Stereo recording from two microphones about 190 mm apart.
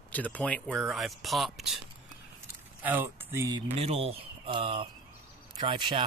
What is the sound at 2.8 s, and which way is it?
Speech, 15° right (ahead or behind).